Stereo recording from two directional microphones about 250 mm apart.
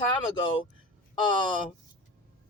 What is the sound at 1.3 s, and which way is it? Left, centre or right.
Speech, centre.